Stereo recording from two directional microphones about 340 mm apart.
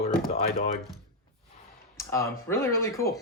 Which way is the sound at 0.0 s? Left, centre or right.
Left.